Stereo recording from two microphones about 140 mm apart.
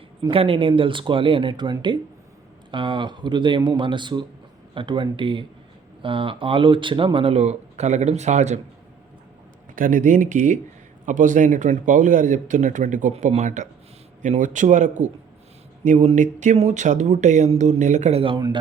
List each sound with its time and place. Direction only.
0.3 s speech: 40° right (ahead or behind)
9.7 s speech: 70° right (ahead or behind); by 18.4 s 40° right (ahead or behind)